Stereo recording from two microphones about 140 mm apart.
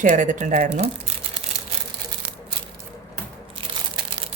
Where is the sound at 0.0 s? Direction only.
65° right (ahead or behind).